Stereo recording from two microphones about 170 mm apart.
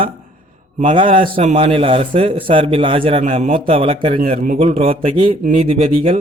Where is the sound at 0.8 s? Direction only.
30° right (ahead or behind).